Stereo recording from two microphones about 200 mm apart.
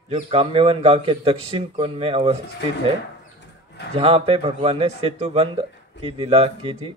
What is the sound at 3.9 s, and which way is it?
Speech, 30° right (ahead or behind).